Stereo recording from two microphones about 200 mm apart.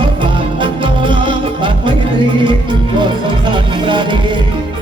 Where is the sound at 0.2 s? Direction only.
25° right (ahead or behind).